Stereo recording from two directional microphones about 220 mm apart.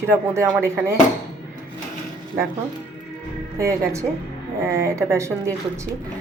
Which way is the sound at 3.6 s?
15° right (ahead or behind).